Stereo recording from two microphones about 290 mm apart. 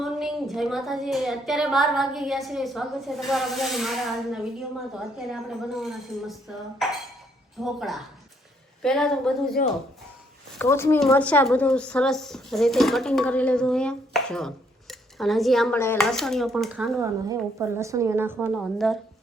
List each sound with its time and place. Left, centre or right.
0.0 s a woman's voice: centre
10.6 s a woman's voice: centre